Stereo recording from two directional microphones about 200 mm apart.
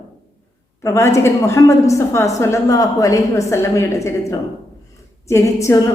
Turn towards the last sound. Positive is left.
turn(degrees=15)  # may be behind; listen again after turning